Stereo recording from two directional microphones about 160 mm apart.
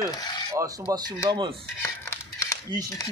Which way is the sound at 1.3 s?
30° right (ahead or behind).